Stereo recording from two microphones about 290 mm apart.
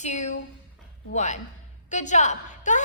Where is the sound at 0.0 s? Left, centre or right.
Left.